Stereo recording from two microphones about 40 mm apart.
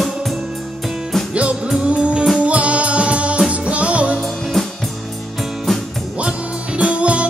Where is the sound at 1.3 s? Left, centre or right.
Right.